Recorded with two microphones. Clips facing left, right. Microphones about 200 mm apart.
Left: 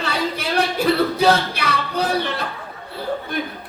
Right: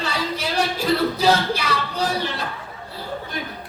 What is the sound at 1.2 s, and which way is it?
Speech, 60° left (ahead or behind).